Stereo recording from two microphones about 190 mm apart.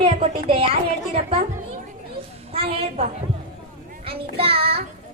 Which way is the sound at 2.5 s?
30° right (ahead or behind).